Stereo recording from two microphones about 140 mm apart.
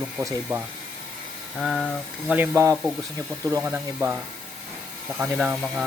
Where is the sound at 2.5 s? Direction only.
20° right (ahead or behind).